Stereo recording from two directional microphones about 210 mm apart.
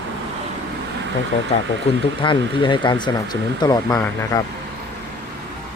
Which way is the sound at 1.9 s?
30° left (ahead or behind).